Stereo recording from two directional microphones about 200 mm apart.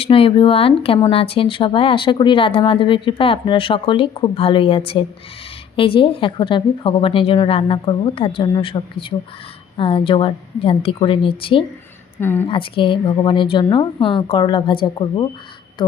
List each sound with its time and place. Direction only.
0.0 s speech: 25° left (ahead or behind)
12.2 s a woman's voice: 10° left (ahead or behind)
12.5 s speech: 25° left (ahead or behind)